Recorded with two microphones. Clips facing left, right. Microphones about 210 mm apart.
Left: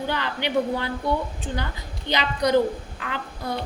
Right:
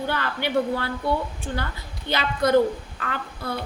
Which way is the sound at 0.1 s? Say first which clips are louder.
Even; 15° left (ahead or behind).